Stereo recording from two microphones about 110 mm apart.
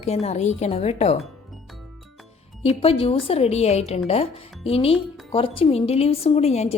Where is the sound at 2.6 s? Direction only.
60° left (ahead or behind).